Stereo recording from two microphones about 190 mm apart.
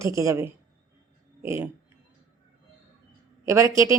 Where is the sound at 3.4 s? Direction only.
15° right (ahead or behind).